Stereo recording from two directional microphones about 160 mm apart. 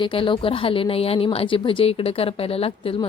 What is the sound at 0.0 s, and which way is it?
A woman's voice, 35° left (ahead or behind).